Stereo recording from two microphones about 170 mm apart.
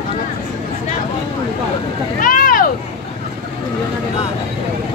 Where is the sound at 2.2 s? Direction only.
55° left (ahead or behind).